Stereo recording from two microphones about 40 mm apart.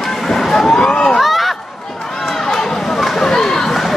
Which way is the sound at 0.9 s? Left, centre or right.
Left.